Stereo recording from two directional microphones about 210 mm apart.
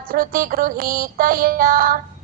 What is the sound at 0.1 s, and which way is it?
Music, 45° right (ahead or behind).